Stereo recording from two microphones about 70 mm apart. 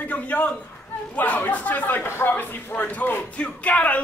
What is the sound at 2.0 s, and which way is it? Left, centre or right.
Speech, left.